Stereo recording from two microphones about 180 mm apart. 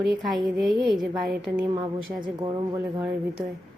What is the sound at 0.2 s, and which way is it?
A woman's voice, centre (ahead or behind).